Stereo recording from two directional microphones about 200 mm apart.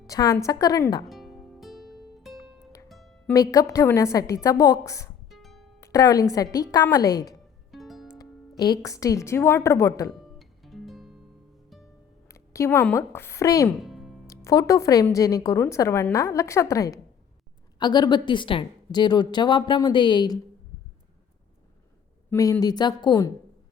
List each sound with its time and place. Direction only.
0.1 s a woman's voice: 15° left (ahead or behind)
1.0 s music: centre (ahead or behind)
3.3 s a woman's voice: 15° left (ahead or behind)
5.3 s music: centre (ahead or behind)
5.8 s a woman's voice: 15° left (ahead or behind)
7.7 s music: centre (ahead or behind)
8.2 s speech: 20° left (ahead or behind)
10.2 s music: centre (ahead or behind)
12.3 s speech: 15° left (ahead or behind)
13.7 s music: centre (ahead or behind)
14.3 s a woman's voice: 15° left (ahead or behind)
22.3 s a woman's voice: 15° left (ahead or behind)